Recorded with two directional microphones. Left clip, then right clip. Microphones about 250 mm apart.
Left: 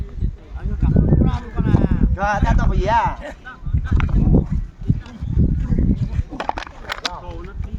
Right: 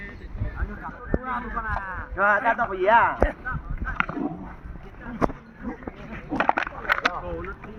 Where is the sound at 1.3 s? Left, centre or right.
Left.